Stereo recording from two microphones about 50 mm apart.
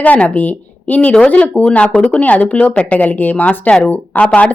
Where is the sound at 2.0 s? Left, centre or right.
Left.